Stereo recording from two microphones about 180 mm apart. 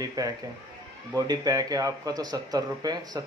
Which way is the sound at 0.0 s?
20° right (ahead or behind).